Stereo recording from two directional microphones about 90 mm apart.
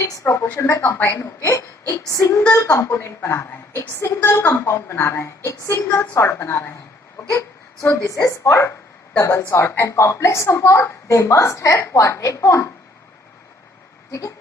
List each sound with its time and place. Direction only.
0.2 s a woman's voice: 20° left (ahead or behind)
14.1 s a woman's voice: 40° left (ahead or behind)